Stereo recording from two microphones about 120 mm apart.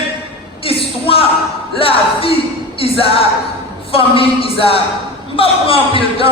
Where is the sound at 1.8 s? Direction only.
50° left (ahead or behind).